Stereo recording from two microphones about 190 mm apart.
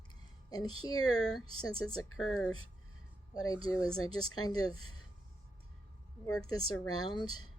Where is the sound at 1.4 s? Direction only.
90° left.